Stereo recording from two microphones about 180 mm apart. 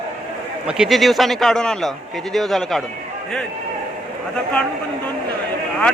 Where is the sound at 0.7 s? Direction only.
Centre (ahead or behind).